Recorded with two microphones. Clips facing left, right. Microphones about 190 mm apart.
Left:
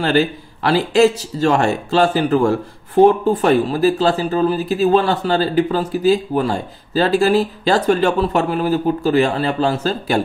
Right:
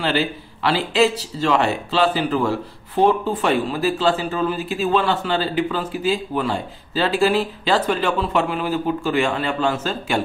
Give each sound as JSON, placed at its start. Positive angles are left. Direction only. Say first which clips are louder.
{"t": 0.0, "sound": "speech", "louder": "left 5 dB", "side_deg": 45}